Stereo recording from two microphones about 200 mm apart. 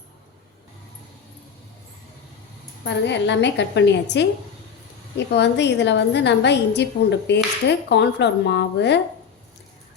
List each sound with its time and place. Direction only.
2.8 s a woman's voice: 60° left (ahead or behind)